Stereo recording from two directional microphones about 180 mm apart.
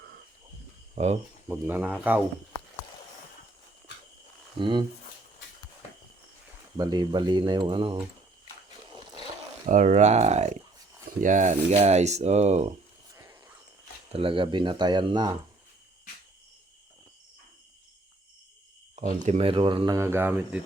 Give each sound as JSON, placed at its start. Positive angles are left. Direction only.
{"t": 0.9, "sound": "speech", "side_deg": -40}
{"t": 1.5, "sound": "speech", "side_deg": -10}
{"t": 6.7, "sound": "speech", "side_deg": -20}
{"t": 9.6, "sound": "speech", "side_deg": -45}
{"t": 14.1, "sound": "speech", "side_deg": -30}
{"t": 19.2, "sound": "speech", "side_deg": -35}